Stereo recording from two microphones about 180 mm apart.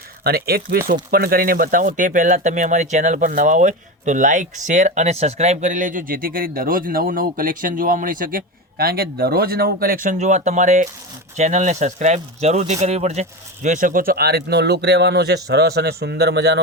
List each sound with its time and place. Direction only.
0.3 s a man's voice: 60° right (ahead or behind)